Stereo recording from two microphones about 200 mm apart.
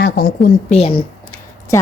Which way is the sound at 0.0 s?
55° left (ahead or behind).